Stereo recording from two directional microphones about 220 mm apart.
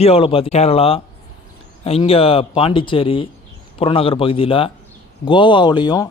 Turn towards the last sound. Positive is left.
turn(degrees=20)  # may be behind; listen again after turning